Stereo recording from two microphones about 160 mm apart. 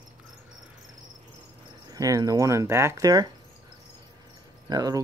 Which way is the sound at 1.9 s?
20° right (ahead or behind).